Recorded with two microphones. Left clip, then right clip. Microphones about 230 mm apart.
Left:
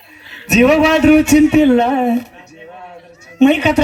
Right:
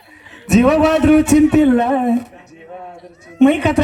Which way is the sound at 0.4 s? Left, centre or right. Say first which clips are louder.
Left 2 dB; right.